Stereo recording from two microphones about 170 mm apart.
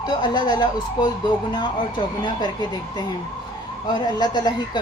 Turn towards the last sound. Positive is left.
turn(degrees=25)  # may be behind; listen again after turning